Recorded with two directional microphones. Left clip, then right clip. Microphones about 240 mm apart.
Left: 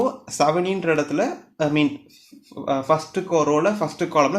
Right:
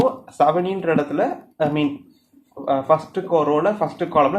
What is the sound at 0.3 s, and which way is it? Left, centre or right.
Speech, left.